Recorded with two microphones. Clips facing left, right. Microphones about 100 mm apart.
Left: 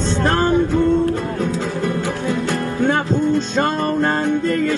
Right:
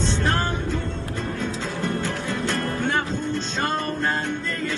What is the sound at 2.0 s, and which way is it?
Music, 10° left (ahead or behind).